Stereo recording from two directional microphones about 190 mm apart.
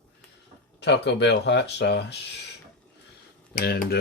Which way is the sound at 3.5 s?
50° left (ahead or behind).